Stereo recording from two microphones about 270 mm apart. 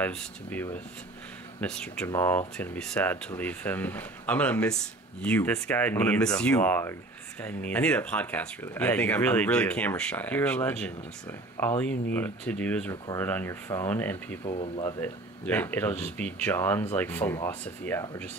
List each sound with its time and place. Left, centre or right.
0.0 s speech: centre
14.4 s speech: left
15.0 s speech: centre